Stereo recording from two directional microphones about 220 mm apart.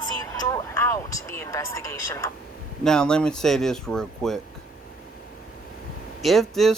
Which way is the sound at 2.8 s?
5° left (ahead or behind).